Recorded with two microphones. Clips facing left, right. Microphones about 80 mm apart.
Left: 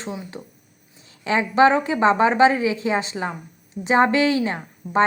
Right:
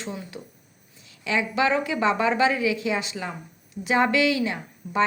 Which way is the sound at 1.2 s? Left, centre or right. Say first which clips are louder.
Left 7 dB; left.